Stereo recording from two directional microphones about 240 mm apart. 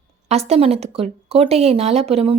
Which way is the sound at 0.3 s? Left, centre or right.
Right.